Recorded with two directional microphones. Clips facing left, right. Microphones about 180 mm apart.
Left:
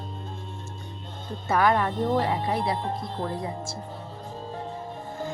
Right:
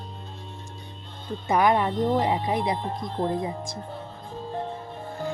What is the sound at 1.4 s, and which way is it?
Speech, 15° right (ahead or behind).